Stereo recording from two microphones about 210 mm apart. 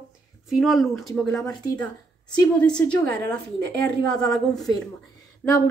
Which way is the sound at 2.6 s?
5° left (ahead or behind).